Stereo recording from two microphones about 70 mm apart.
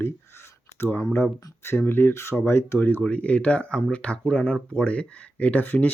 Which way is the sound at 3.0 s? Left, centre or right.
Centre.